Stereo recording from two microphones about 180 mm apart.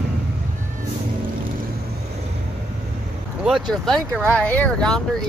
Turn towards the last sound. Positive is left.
turn(degrees=5)  # may be behind; listen again after turning